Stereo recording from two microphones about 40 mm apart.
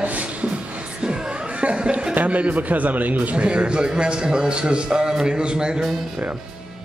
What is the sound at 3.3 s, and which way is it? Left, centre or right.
A man's voice, right.